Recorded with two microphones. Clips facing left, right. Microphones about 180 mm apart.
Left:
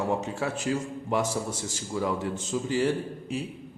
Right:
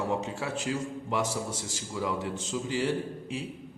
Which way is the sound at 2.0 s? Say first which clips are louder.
Left 1 dB; 45° left (ahead or behind).